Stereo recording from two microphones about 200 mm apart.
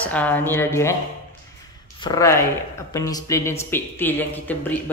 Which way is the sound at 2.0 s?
20° left (ahead or behind).